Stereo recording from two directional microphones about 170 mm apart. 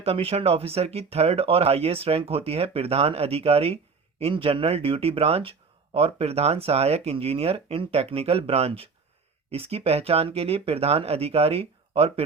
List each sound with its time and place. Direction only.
0.0 s speech: 35° right (ahead or behind)